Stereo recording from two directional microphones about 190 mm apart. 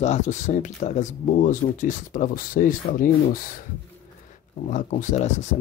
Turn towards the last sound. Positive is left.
turn(degrees=40)  # may be behind; listen again after turning